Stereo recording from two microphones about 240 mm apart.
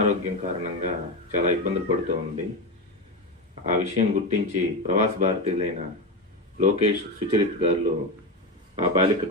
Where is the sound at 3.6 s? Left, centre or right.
Right.